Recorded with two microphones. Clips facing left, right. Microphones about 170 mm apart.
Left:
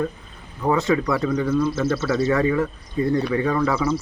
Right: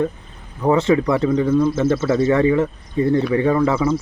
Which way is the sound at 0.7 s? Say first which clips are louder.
Right 4 dB; 25° right (ahead or behind).